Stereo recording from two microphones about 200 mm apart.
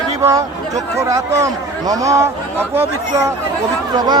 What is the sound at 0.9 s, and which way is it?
A man's voice, 15° right (ahead or behind).